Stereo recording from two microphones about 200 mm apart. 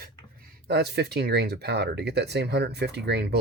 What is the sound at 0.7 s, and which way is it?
Speech, 55° right (ahead or behind).